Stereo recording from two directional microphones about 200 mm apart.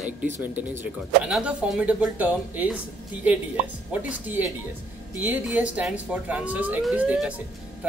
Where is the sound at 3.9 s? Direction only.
10° right (ahead or behind).